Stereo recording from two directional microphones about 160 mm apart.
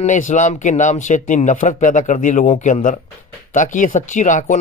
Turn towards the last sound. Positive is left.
turn(degrees=50)  # may be behind; listen again after turning